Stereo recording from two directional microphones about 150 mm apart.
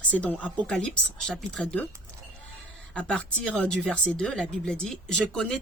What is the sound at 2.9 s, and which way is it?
Speech, 5° left (ahead or behind).